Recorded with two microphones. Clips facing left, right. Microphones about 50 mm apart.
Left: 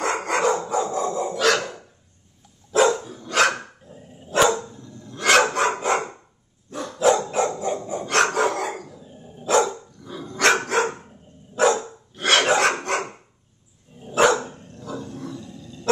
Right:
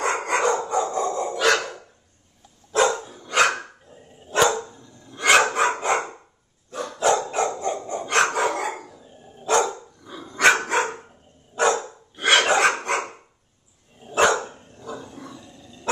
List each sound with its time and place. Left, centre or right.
0.0 s dog: centre